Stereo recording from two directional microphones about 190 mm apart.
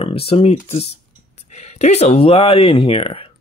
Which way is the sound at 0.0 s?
30° left (ahead or behind).